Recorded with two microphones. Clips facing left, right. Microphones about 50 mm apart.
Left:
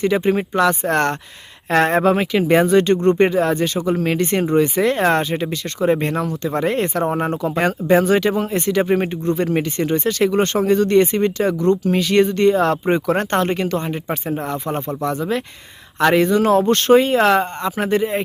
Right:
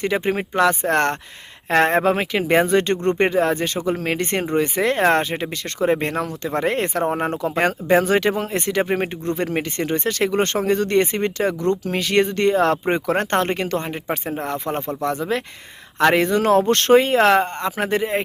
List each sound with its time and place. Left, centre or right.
0.0 s speech: right
8.8 s speech: right
9.4 s speech: right
16.0 s speech: right